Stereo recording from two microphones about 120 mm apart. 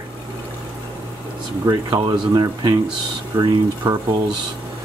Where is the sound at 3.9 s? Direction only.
30° right (ahead or behind).